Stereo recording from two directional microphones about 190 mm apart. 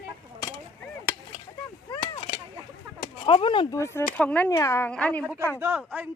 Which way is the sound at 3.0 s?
25° left (ahead or behind).